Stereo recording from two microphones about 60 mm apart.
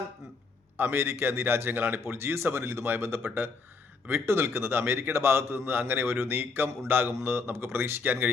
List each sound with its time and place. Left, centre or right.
0.8 s a man's voice: right